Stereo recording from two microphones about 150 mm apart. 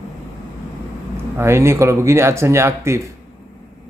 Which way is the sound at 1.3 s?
15° right (ahead or behind).